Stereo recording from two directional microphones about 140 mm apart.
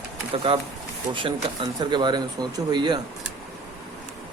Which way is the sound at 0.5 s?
40° right (ahead or behind).